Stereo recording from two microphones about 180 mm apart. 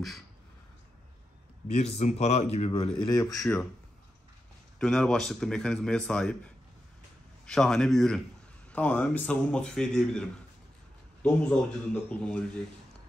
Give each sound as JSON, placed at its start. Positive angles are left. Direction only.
{"t": 1.8, "sound": "a man's voice", "side_deg": 40}
{"t": 3.2, "sound": "speech", "side_deg": 20}
{"t": 4.7, "sound": "a man's voice", "side_deg": 5}